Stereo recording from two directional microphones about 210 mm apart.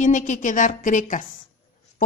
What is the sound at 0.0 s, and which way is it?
A woman's voice, 35° left (ahead or behind).